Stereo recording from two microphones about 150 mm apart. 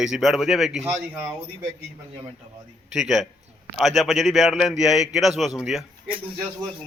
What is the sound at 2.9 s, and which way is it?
Speech, centre (ahead or behind).